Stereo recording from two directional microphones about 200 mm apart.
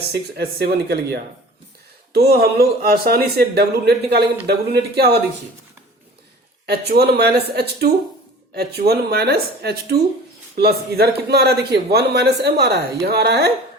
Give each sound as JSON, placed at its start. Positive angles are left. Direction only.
{"t": 0.1, "sound": "a man's voice", "side_deg": -55}
{"t": 6.7, "sound": "a man's voice", "side_deg": -55}